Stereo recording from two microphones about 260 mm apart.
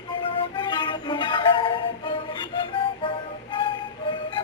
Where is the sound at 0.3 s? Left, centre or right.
Centre.